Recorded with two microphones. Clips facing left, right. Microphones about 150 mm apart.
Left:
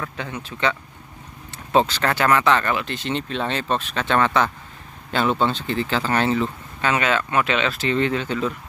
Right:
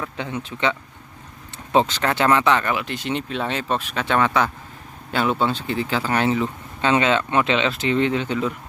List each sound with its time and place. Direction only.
0.0 s speech: 20° right (ahead or behind)